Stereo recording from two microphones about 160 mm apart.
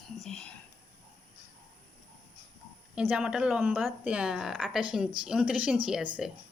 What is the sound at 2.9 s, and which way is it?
A woman's voice, 10° right (ahead or behind).